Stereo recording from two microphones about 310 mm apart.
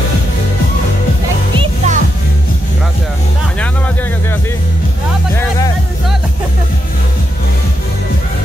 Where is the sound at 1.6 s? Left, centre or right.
Right.